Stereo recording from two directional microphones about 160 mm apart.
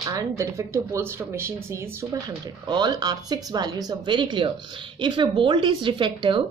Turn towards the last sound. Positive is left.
turn(degrees=-30)  # may be behind; listen again after turning